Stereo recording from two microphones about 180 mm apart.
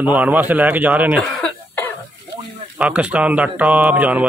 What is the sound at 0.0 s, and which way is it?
Speech, 10° right (ahead or behind).